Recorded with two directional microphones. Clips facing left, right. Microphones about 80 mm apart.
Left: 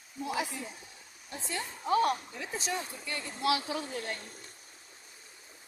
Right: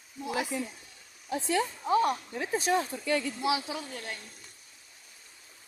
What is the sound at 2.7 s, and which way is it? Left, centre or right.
Speech, right.